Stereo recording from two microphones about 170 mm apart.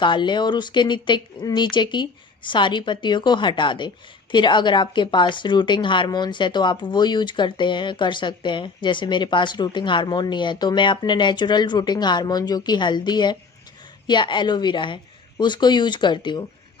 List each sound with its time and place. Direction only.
0.0 s speech: 25° left (ahead or behind)